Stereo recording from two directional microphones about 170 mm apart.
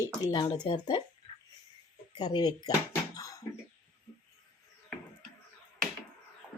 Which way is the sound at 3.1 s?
20° left (ahead or behind).